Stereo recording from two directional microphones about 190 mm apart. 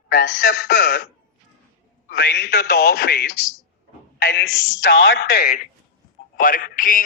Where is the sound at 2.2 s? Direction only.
60° left (ahead or behind); by 5.2 s 85° left.